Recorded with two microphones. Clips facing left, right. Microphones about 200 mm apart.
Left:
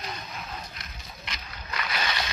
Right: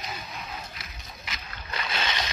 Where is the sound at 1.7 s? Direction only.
25° right (ahead or behind).